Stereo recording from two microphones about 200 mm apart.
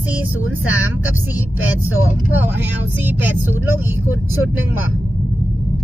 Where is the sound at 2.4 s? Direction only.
10° right (ahead or behind).